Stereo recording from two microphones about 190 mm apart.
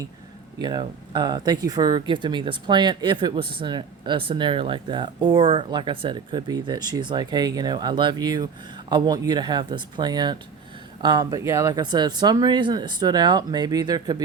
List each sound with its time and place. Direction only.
0.6 s speech: 20° right (ahead or behind)